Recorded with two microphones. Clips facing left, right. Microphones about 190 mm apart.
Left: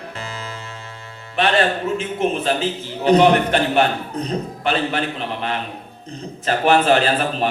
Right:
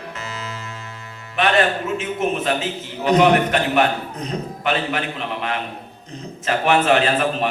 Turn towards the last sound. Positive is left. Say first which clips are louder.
# even
turn(degrees=35)  # may be behind; listen again after turning